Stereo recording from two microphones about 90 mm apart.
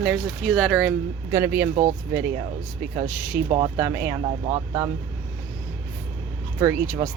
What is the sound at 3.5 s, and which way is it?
Speech, 65° right (ahead or behind).